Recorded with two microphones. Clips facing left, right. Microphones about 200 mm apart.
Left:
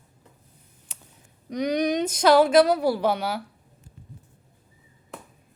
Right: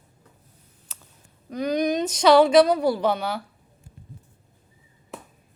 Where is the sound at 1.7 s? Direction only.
15° left (ahead or behind).